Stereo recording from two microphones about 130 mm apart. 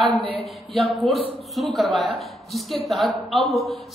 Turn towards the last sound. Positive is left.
turn(degrees=0)  # may be behind; listen again after turning